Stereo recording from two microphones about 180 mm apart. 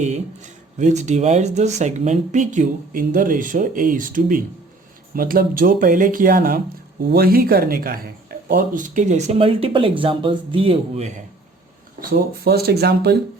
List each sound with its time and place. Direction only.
0.8 s speech: 40° right (ahead or behind)
12.5 s speech: 60° right (ahead or behind)